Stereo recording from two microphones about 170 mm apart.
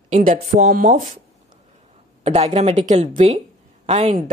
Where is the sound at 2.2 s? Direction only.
40° right (ahead or behind).